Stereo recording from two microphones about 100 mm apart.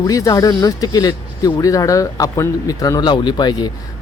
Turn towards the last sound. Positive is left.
turn(degrees=45)  # may be behind; listen again after turning